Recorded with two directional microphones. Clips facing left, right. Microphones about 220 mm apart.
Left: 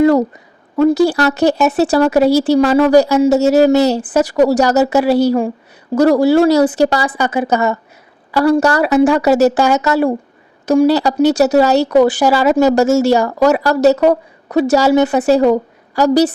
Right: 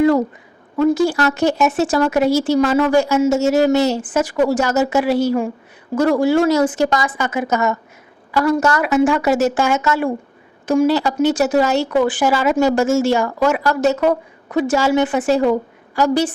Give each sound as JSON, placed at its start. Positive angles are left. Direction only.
{"t": 0.0, "sound": "a woman's voice", "side_deg": 40}